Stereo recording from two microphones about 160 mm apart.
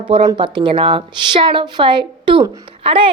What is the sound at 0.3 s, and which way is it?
A woman's voice, 30° right (ahead or behind).